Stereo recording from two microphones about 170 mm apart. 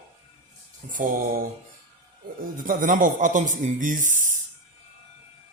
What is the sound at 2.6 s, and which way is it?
A man's voice, 50° right (ahead or behind).